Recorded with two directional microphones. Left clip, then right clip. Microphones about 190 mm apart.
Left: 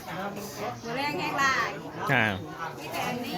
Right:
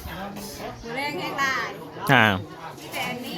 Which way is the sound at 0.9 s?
15° right (ahead or behind).